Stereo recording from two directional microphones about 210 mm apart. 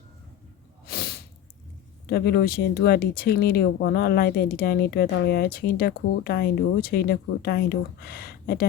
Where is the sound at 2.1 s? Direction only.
50° left (ahead or behind).